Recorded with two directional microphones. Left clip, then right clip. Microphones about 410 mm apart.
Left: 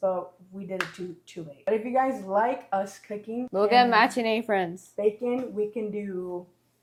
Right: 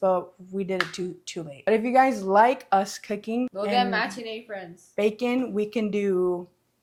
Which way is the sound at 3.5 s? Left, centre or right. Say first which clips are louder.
Left 6 dB; centre.